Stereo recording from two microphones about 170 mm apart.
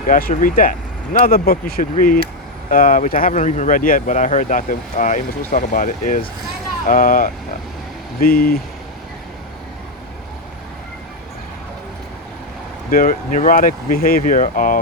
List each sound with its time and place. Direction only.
0.1 s speech: 55° left (ahead or behind)
12.9 s speech: 50° left (ahead or behind)